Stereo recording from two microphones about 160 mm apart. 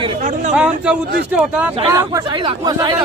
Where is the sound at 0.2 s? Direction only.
50° right (ahead or behind).